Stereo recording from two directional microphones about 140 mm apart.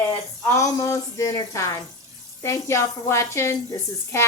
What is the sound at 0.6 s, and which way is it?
A woman's voice, 25° left (ahead or behind).